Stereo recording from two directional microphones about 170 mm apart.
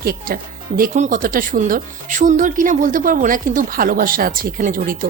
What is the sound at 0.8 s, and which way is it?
Speech, 50° right (ahead or behind).